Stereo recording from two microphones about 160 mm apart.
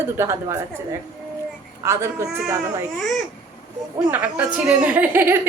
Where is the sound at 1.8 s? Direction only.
15° right (ahead or behind).